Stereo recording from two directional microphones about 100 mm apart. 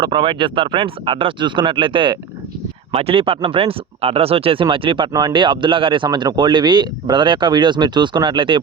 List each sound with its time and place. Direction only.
0.0 s speech: 50° right (ahead or behind)
2.9 s speech: 80° right; by 5.0 s 60° right (ahead or behind)
5.1 s speech: 50° right (ahead or behind)
6.1 s speech: 45° right (ahead or behind)